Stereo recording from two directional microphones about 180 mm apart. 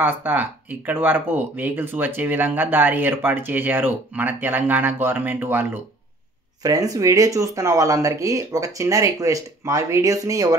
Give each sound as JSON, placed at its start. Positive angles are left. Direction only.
{"t": 0.0, "sound": "speech", "side_deg": -10}